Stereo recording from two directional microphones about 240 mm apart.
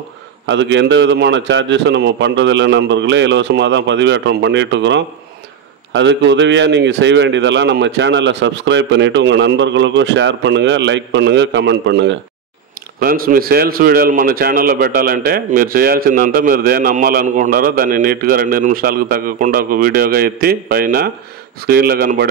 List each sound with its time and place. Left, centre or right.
0.5 s a man's voice: right